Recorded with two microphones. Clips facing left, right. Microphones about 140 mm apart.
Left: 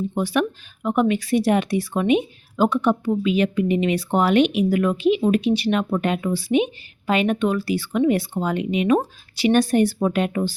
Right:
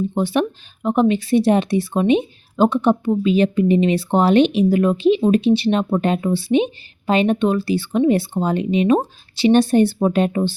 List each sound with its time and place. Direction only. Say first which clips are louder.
0.1 s speech: right 2 dB; 25° right (ahead or behind)